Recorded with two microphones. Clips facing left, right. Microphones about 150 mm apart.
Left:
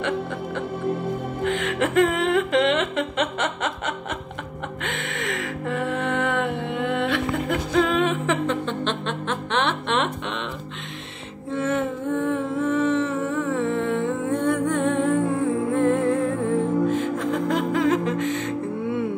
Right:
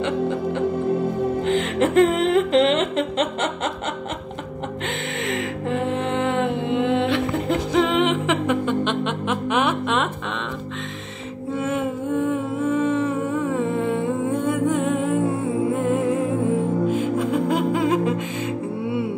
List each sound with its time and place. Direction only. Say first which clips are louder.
0.0 s music: right 4 dB; 20° right (ahead or behind)
4.8 s music: right 1 dB; 25° right (ahead or behind); by 10.0 s 5° right (ahead or behind)
11.5 s music: even; 10° right (ahead or behind)